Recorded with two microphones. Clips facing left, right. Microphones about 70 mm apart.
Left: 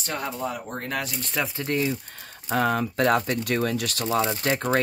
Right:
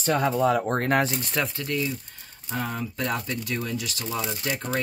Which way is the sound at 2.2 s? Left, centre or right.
Left.